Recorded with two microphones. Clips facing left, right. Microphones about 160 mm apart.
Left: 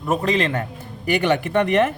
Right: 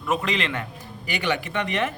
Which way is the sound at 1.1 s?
55° left (ahead or behind).